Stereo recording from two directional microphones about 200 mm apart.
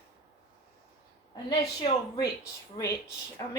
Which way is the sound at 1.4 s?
20° left (ahead or behind).